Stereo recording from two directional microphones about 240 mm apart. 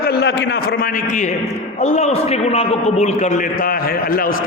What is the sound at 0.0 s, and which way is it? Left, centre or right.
A man's voice, left.